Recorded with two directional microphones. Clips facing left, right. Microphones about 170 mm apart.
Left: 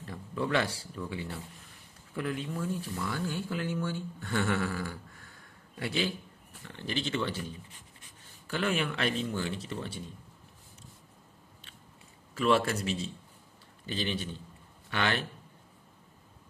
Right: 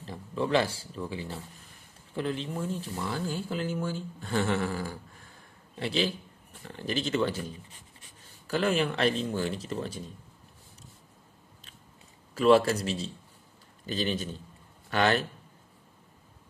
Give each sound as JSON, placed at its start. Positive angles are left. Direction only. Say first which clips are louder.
{"t": 0.0, "sound": "speech", "louder": "right 2 dB", "side_deg": -25}
{"t": 12.4, "sound": "speech", "louder": "right 5 dB", "side_deg": -35}